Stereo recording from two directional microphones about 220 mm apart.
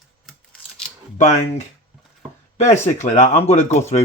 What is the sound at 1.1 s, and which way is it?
Speech, 30° left (ahead or behind).